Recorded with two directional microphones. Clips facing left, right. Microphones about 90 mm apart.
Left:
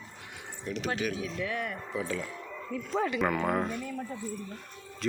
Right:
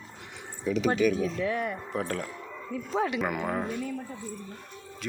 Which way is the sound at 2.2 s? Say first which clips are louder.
Right 1 dB; 15° right (ahead or behind).